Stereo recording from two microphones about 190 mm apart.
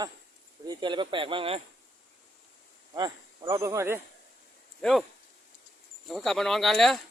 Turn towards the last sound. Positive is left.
turn(degrees=0)  # may be behind; listen again after turning